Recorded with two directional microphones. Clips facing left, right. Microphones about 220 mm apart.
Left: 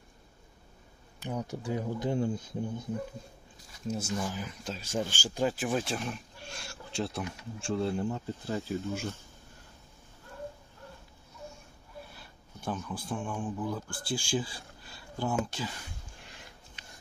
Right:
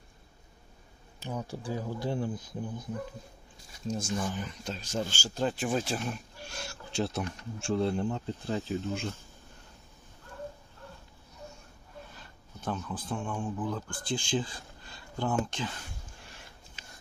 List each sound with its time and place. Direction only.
1.2 s speech: 15° left (ahead or behind)
3.8 s speech: 5° left (ahead or behind)
12.1 s a sound: 10° left (ahead or behind)
13.4 s speech: 10° left (ahead or behind)